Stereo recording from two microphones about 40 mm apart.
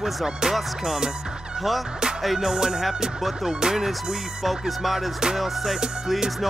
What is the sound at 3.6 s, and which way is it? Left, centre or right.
Music, centre.